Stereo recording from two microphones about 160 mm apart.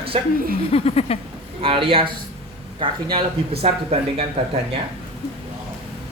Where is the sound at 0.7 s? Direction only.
40° left (ahead or behind).